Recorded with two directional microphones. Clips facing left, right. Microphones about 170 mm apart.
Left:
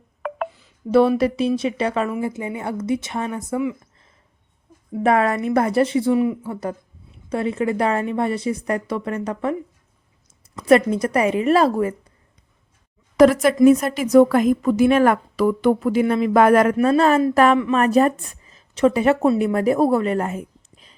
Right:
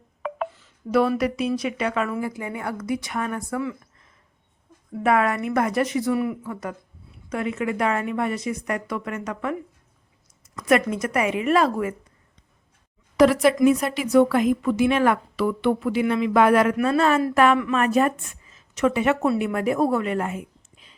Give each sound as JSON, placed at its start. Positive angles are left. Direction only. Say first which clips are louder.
{"t": 0.9, "sound": "a woman's voice", "louder": "left 5 dB", "side_deg": 30}
{"t": 4.9, "sound": "speech", "louder": "left 3 dB", "side_deg": 35}
{"t": 10.6, "sound": "speech", "louder": "left 5 dB", "side_deg": 30}
{"t": 13.1, "sound": "a woman's voice", "louder": "left 3 dB", "side_deg": 45}
{"t": 16.7, "sound": "a woman's voice", "louder": "left 4 dB", "side_deg": 30}